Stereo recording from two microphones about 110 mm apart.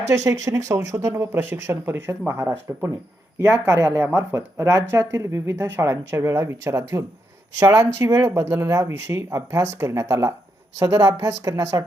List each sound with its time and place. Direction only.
0.1 s speech: 30° right (ahead or behind)